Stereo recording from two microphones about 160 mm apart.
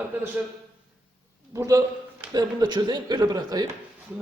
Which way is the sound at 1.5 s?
20° right (ahead or behind).